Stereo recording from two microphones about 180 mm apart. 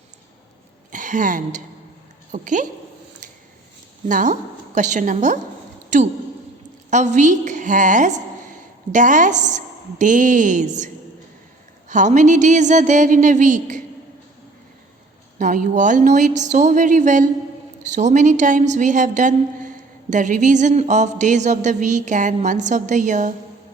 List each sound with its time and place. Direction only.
0.9 s a woman's voice: 45° right (ahead or behind)
4.1 s a woman's voice: 45° right (ahead or behind)
6.9 s a woman's voice: 40° right (ahead or behind)
11.9 s a woman's voice: 45° right (ahead or behind)
15.4 s a woman's voice: 45° right (ahead or behind)